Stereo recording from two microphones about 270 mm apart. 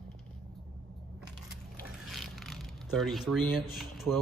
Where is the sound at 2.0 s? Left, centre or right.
Centre.